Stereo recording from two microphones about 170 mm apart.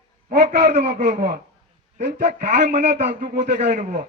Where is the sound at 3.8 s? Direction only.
50° right (ahead or behind).